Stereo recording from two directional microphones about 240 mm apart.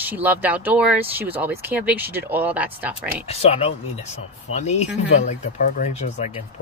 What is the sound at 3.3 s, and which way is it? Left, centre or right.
Speech, left.